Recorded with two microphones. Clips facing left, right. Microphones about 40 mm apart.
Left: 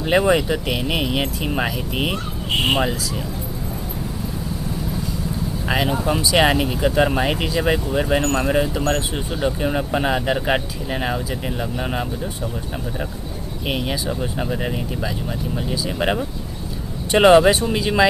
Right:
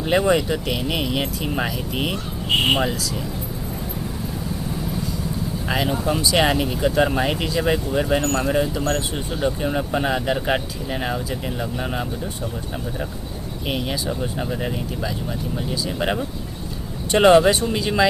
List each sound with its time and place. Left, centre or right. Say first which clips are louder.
0.0 s speech: left 1 dB; centre
5.6 s speech: left 2 dB; centre
13.7 s speech: left 1 dB; centre